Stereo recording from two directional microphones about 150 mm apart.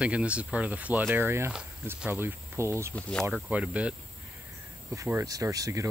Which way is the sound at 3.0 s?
5° left (ahead or behind).